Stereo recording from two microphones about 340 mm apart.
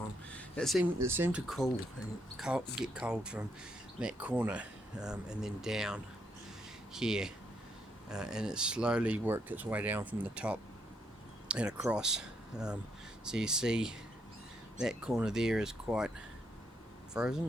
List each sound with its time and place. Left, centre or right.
0.3 s speech: centre
17.2 s speech: centre